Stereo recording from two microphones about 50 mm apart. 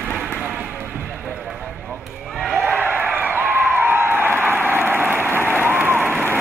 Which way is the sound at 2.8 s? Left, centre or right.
Right.